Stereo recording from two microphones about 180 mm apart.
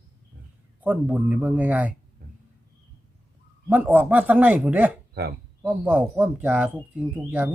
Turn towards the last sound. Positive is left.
turn(degrees=-10)  # may be behind; listen again after turning